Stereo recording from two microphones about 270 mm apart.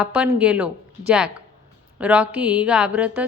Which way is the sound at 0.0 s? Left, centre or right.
Centre.